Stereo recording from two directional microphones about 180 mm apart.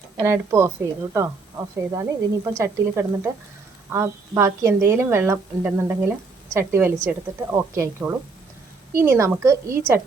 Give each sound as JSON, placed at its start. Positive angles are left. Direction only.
{"t": 0.2, "sound": "speech", "side_deg": -15}